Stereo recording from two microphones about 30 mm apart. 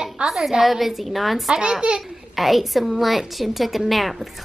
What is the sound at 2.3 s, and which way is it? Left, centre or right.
Speech, centre.